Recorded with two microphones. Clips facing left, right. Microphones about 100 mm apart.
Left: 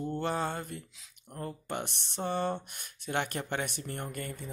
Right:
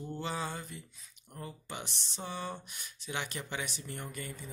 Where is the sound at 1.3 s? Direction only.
50° left (ahead or behind).